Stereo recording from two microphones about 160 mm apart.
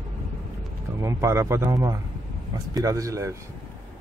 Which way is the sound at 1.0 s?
15° right (ahead or behind).